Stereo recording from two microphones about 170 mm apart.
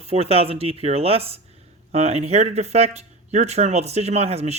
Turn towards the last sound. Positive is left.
turn(degrees=-40)  # may be behind; listen again after turning